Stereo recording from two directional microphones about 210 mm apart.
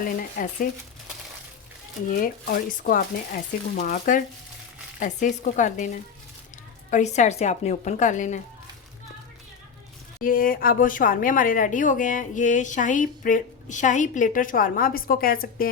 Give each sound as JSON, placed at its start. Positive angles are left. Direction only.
{"t": 0.0, "sound": "a woman's voice", "side_deg": 40}
{"t": 2.0, "sound": "a woman's voice", "side_deg": 40}
{"t": 10.2, "sound": "a woman's voice", "side_deg": 40}